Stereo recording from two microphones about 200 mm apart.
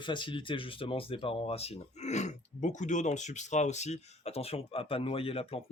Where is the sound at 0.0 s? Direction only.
25° left (ahead or behind).